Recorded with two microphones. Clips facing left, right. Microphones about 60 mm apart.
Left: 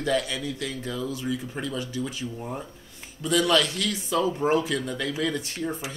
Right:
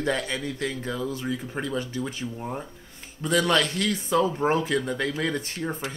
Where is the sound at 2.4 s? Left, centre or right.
Centre.